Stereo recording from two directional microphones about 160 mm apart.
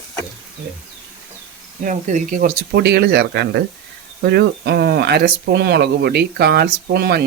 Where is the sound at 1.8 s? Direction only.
50° right (ahead or behind).